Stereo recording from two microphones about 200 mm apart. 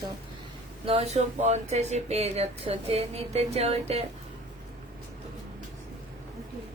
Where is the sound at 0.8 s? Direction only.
30° right (ahead or behind).